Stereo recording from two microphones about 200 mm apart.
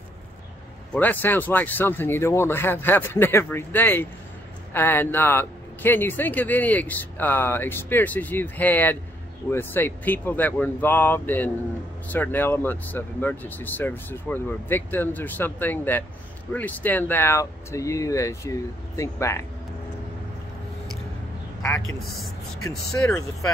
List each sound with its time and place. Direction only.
0.9 s speech: 10° left (ahead or behind)
22.6 s speech: 15° left (ahead or behind)